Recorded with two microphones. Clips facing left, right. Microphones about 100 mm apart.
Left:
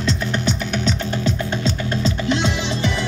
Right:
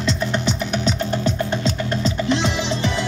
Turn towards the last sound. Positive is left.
turn(degrees=-30)  # may be behind; listen again after turning